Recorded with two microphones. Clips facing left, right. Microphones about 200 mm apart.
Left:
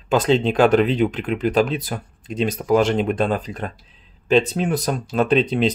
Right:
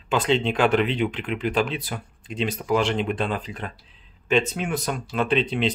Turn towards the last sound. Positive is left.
turn(degrees=40)  # may be behind; listen again after turning